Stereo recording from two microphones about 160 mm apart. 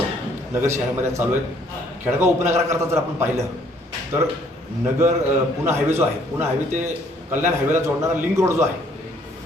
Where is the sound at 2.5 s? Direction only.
15° right (ahead or behind).